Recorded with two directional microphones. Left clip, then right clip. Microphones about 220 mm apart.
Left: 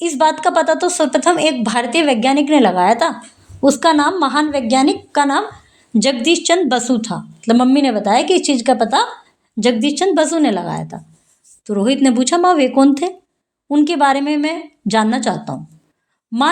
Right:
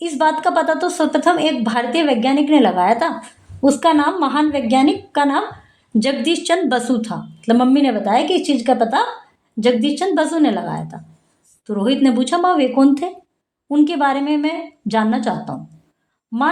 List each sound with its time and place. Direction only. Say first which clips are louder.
0.0 s a woman's voice: left 2 dB; 35° left (ahead or behind)